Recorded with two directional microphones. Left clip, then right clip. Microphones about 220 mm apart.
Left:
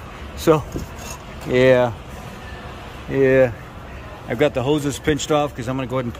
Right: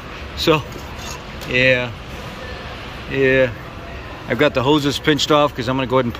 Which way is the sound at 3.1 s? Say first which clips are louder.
Even; 20° left (ahead or behind).